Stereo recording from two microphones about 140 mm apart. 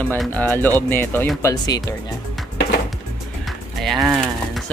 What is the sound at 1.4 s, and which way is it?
Speech, 30° left (ahead or behind).